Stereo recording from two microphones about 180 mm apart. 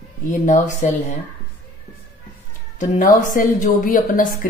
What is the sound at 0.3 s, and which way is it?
Speech, 40° left (ahead or behind).